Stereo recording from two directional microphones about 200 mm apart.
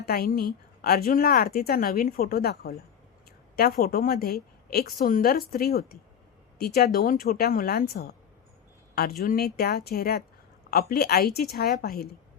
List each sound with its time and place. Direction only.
0.0 s a woman's voice: 50° left (ahead or behind)